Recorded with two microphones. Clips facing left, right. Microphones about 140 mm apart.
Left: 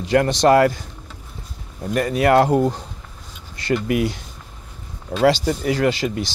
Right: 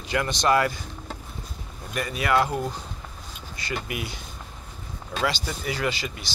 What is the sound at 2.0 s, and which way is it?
Speech, 65° left (ahead or behind).